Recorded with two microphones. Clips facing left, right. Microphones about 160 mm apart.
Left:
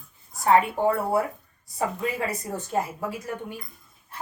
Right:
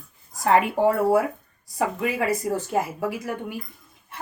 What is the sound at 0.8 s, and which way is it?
A woman's voice, 90° right.